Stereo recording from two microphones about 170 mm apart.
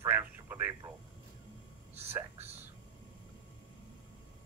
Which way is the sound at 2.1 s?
15° right (ahead or behind).